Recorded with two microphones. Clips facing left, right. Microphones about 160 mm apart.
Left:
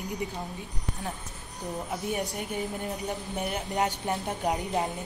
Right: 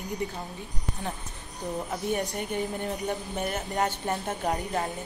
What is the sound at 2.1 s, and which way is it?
Speech, 5° left (ahead or behind).